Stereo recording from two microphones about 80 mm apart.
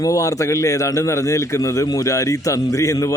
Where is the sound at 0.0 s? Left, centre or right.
Left.